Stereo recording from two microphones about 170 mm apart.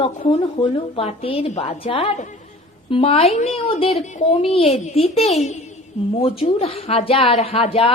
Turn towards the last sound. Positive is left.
turn(degrees=35)  # may be behind; listen again after turning